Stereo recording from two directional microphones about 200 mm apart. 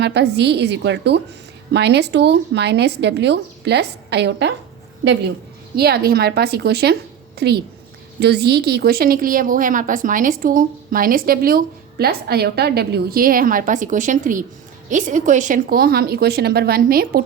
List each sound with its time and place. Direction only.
0.0 s a woman's voice: 55° right (ahead or behind)
5.7 s a woman's voice: 50° right (ahead or behind)